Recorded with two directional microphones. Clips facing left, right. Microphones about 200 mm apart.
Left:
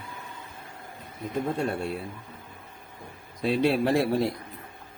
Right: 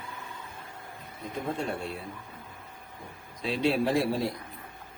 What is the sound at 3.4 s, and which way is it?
Speech, 60° left (ahead or behind).